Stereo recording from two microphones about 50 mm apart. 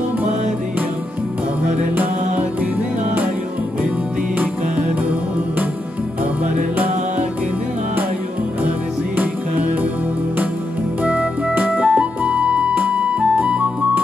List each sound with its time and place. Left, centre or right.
8.6 s music: right
11.8 s music: right